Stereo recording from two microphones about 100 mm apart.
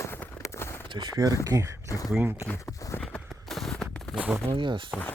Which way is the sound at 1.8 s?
35° left (ahead or behind).